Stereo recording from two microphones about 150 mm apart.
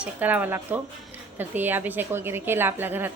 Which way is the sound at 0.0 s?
10° right (ahead or behind).